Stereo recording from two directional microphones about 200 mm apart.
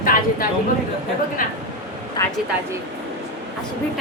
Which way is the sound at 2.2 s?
15° left (ahead or behind).